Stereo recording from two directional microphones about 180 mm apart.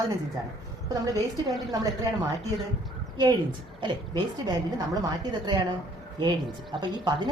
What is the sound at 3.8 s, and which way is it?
Speech, 25° right (ahead or behind).